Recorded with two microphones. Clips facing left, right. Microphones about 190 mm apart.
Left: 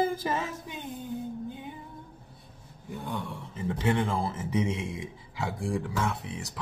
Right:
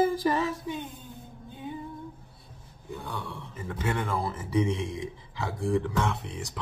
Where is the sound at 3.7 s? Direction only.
25° left (ahead or behind).